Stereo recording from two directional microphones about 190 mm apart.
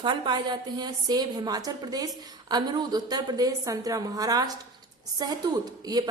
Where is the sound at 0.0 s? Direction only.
25° right (ahead or behind).